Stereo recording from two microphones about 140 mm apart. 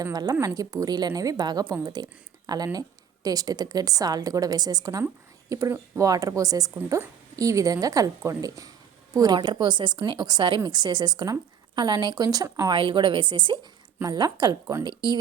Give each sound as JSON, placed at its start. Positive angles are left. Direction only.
{"t": 0.0, "sound": "a woman's voice", "side_deg": -25}